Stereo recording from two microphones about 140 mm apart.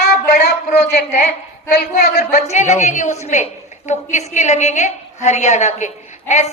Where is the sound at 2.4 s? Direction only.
55° left (ahead or behind).